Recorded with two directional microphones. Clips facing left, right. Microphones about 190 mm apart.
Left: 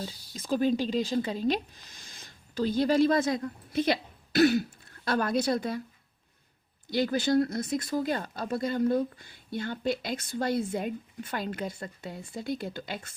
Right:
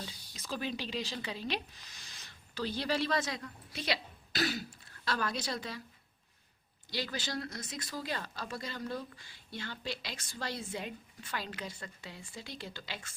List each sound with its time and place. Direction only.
0.0 s speech: 50° left (ahead or behind)
6.9 s speech: 50° left (ahead or behind)